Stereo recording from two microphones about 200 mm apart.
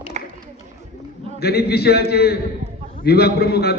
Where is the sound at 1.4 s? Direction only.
55° left (ahead or behind).